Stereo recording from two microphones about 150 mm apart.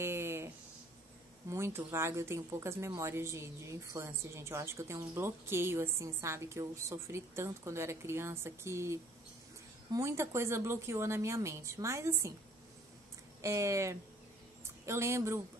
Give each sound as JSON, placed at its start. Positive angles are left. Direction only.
{"t": 0.0, "sound": "a sound", "side_deg": -15}
{"t": 1.5, "sound": "a woman's voice", "side_deg": -15}
{"t": 9.9, "sound": "a woman's voice", "side_deg": -20}
{"t": 13.4, "sound": "speech", "side_deg": -20}